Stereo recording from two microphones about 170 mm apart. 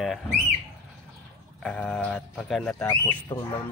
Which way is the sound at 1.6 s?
5° left (ahead or behind).